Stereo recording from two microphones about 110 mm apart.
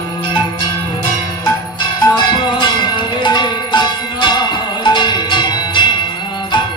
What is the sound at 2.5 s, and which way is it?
Cowbell, 45° left (ahead or behind).